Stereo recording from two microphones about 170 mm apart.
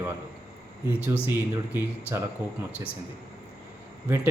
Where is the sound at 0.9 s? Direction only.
10° right (ahead or behind).